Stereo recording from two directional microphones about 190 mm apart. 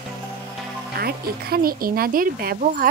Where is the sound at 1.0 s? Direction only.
55° right (ahead or behind).